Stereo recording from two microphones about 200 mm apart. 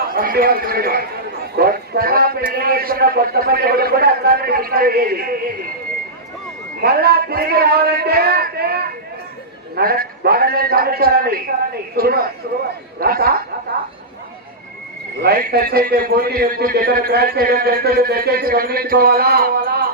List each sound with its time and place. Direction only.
0.1 s a man's voice: 45° right (ahead or behind)
6.8 s a man's voice: 50° right (ahead or behind)
15.2 s a man's voice: 50° right (ahead or behind)